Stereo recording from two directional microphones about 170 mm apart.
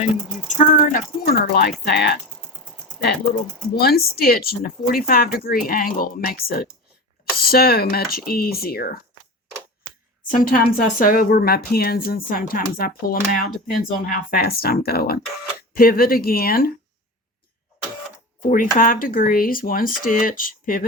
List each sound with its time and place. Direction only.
0.0 s speech: 45° left (ahead or behind); by 2.1 s 75° left (ahead or behind)
3.8 s a woman's voice: 65° left (ahead or behind)
10.3 s a woman's voice: 55° left (ahead or behind)
18.3 s a woman's voice: 55° left (ahead or behind)